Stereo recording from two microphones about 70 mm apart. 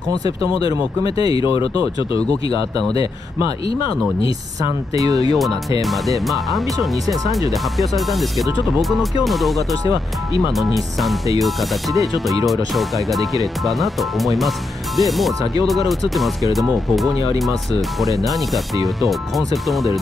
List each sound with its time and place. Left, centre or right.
1.1 s speech: right
4.9 s speech: right
5.8 s speech: centre
9.6 s speech: right
10.6 s speech: centre
12.4 s speech: centre
16.9 s speech: centre